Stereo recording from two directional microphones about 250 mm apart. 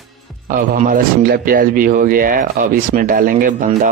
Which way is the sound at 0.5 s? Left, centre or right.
Right.